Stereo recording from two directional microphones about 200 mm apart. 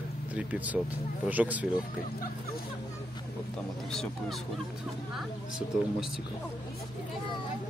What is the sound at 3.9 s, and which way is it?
Speech, centre (ahead or behind).